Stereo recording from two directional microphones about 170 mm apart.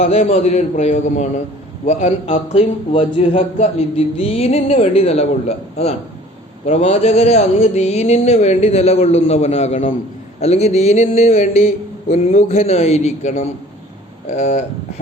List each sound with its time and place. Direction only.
0.0 s speech: 40° left (ahead or behind)